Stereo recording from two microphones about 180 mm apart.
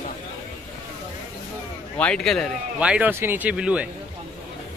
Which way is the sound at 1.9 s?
5° left (ahead or behind).